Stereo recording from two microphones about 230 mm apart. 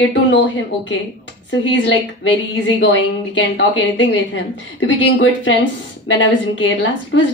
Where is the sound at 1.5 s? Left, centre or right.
Left.